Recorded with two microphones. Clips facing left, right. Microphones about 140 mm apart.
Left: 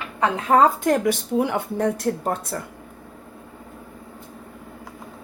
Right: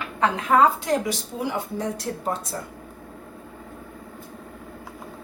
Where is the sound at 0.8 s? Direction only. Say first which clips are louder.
Left 5 dB; 55° left (ahead or behind).